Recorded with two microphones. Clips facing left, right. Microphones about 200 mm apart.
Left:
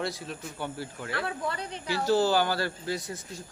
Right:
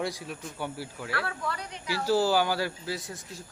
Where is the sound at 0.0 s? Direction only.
10° right (ahead or behind).